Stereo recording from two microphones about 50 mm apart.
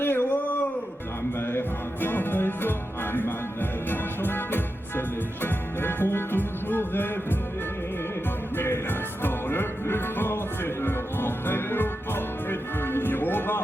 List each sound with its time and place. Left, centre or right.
0.0 s a sound: left
1.4 s music: left
8.5 s music: left